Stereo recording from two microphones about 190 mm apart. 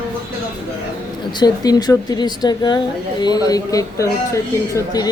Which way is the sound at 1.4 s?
20° left (ahead or behind).